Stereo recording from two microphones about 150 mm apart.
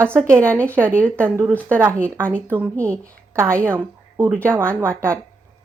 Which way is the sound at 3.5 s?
15° right (ahead or behind).